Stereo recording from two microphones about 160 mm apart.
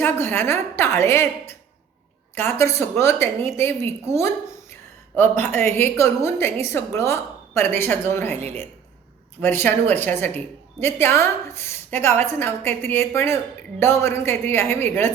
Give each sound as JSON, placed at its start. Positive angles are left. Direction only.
{"t": 0.0, "sound": "speech", "side_deg": 15}
{"t": 8.4, "sound": "a woman's voice", "side_deg": -40}
{"t": 9.4, "sound": "speech", "side_deg": 15}